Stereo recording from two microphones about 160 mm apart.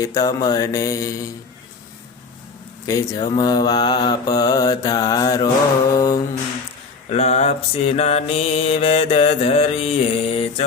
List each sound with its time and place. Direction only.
0.0 s mantra: 20° left (ahead or behind)
2.8 s mantra: 20° left (ahead or behind)
7.1 s mantra: 40° left (ahead or behind)